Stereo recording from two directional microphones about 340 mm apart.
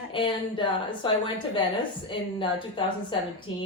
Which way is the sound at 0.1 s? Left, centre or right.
Centre.